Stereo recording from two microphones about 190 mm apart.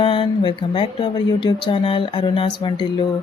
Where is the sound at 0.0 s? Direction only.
25° left (ahead or behind).